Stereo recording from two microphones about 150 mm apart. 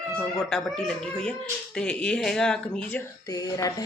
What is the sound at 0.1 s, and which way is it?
Speech, 5° left (ahead or behind).